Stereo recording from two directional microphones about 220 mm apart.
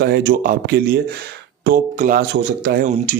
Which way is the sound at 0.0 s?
45° right (ahead or behind).